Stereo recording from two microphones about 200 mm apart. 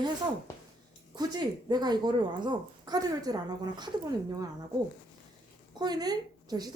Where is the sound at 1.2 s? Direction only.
20° right (ahead or behind).